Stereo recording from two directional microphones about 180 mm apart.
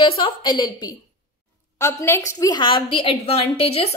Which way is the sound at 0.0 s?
25° left (ahead or behind).